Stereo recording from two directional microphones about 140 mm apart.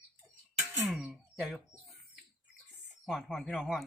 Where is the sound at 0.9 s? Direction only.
5° right (ahead or behind).